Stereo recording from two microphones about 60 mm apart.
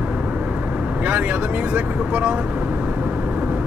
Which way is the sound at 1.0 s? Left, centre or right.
Right.